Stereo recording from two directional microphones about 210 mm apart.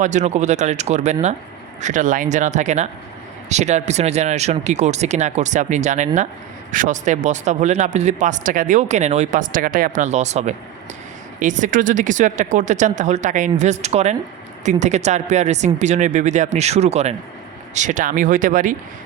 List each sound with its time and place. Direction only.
0.0 s speech: 35° right (ahead or behind)